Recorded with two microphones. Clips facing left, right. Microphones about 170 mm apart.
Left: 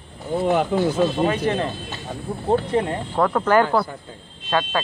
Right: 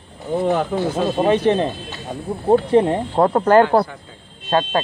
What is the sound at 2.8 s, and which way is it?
Speech, 30° right (ahead or behind).